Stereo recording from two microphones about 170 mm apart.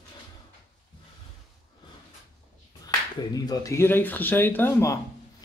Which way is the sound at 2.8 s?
20° left (ahead or behind).